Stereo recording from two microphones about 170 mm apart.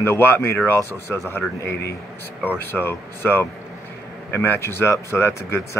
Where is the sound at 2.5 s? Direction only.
10° left (ahead or behind).